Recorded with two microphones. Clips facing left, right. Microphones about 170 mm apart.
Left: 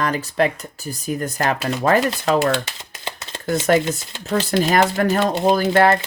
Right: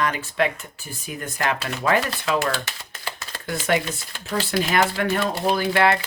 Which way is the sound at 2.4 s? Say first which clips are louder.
Left 6 dB; 20° left (ahead or behind).